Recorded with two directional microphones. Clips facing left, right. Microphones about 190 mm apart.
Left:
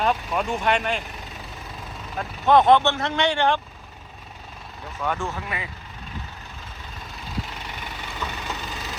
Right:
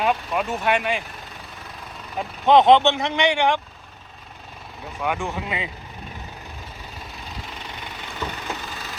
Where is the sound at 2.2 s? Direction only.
20° right (ahead or behind).